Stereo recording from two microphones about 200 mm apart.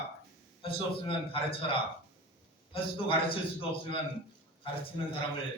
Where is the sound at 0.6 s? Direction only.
25° left (ahead or behind).